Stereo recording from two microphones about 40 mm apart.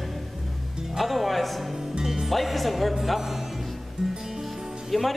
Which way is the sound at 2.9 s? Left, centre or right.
Centre.